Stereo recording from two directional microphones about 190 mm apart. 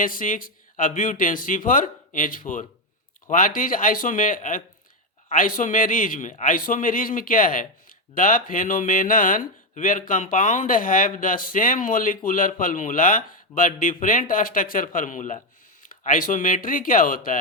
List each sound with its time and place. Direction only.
0.0 s speech: 45° left (ahead or behind)